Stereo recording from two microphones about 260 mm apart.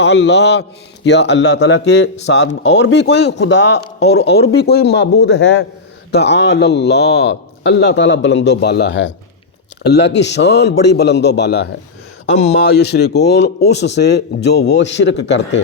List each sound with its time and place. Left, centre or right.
0.0 s a man's voice: left